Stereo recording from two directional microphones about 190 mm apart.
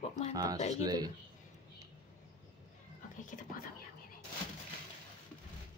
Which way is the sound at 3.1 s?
40° left (ahead or behind).